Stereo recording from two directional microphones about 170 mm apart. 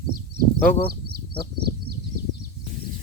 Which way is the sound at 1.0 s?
70° right (ahead or behind).